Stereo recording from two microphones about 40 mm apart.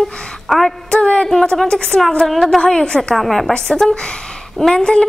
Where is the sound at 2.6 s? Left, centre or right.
Centre.